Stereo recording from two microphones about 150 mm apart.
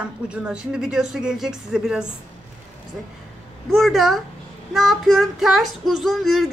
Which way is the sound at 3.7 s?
Centre (ahead or behind).